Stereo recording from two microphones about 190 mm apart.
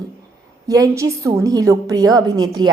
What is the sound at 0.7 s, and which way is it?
A woman's voice, 15° right (ahead or behind).